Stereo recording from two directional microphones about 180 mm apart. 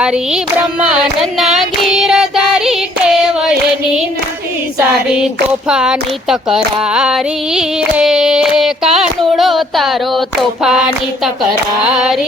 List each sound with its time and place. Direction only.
0.8 s child singing: 5° right (ahead or behind)
5.0 s female singing: 5° right (ahead or behind)